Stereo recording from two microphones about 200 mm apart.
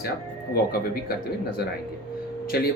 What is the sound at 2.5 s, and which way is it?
Speech, 50° left (ahead or behind).